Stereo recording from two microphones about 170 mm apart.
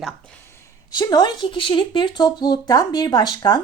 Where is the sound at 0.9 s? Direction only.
25° left (ahead or behind).